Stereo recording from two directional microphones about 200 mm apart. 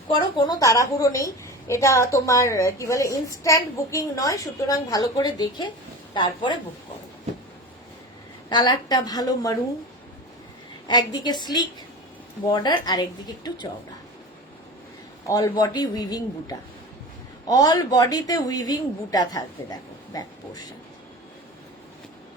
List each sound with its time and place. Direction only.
0.1 s a woman's voice: 20° left (ahead or behind)
8.4 s speech: 20° left (ahead or behind)
10.8 s speech: 20° left (ahead or behind)
15.3 s speech: 20° left (ahead or behind)